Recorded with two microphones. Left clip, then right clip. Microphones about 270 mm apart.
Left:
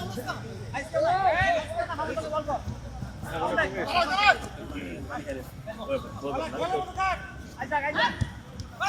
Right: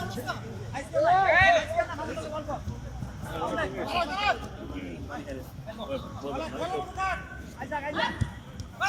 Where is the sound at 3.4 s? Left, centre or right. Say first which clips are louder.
Left 4 dB; centre.